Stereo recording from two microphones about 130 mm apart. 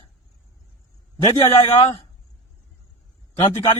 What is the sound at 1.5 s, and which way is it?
Speech, 50° left (ahead or behind).